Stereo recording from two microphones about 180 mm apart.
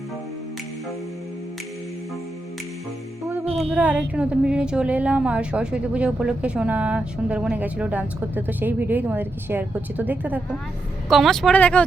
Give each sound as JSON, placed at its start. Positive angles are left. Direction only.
{"t": 3.2, "sound": "music", "side_deg": -15}
{"t": 3.8, "sound": "a woman's voice", "side_deg": -10}
{"t": 11.1, "sound": "speech", "side_deg": 0}